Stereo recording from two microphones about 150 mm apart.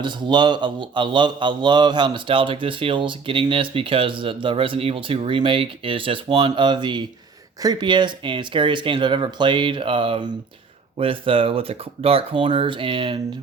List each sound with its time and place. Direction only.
0.0 s speech: 30° right (ahead or behind)